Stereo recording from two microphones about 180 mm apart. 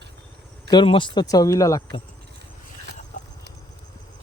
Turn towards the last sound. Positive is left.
turn(degrees=45)  # may be behind; listen again after turning